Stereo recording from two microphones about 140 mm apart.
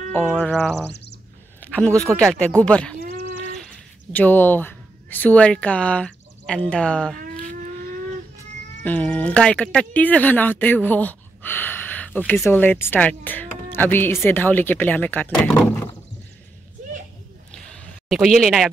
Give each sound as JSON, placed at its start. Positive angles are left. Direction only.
{"t": 0.3, "sound": "music", "side_deg": 5}
{"t": 1.6, "sound": "a sound", "side_deg": 10}
{"t": 2.3, "sound": "speech", "side_deg": 5}
{"t": 4.1, "sound": "speech", "side_deg": 15}
{"t": 8.8, "sound": "speech", "side_deg": 10}
{"t": 17.5, "sound": "a sound", "side_deg": 5}